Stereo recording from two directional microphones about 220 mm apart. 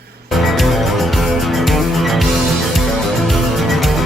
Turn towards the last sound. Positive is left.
turn(degrees=0)  # may be behind; listen again after turning